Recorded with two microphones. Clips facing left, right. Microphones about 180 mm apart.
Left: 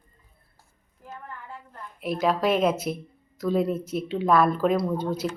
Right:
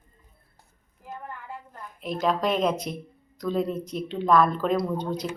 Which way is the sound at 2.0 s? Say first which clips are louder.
Left 1 dB; 5° left (ahead or behind).